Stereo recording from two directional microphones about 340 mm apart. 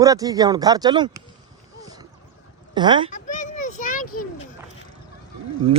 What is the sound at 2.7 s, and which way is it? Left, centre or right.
Speech, centre.